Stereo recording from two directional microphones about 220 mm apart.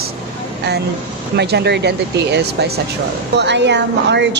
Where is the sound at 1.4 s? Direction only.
50° right (ahead or behind).